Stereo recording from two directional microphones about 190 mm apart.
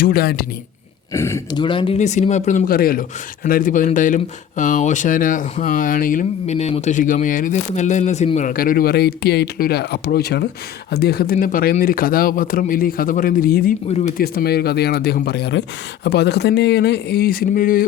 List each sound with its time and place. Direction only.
0.0 s speech: 50° left (ahead or behind)
1.1 s speech: 15° left (ahead or behind)
2.0 s speech: 40° left (ahead or behind)